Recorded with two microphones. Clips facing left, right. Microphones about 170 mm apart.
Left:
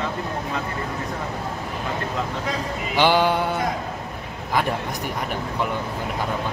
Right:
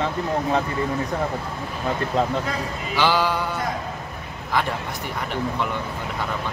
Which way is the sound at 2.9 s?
20° left (ahead or behind).